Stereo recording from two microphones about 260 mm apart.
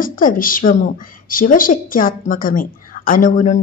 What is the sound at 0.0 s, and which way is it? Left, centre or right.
A woman's voice, left.